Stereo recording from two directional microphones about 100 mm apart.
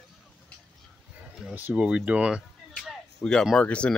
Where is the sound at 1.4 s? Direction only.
15° right (ahead or behind).